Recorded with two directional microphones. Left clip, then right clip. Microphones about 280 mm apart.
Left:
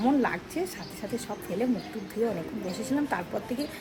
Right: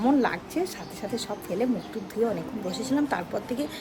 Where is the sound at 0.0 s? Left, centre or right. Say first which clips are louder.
Right 2 dB; centre.